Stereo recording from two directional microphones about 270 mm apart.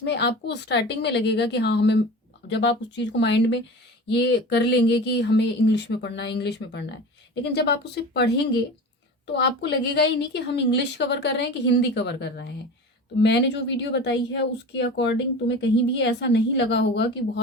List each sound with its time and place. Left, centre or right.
0.0 s speech: left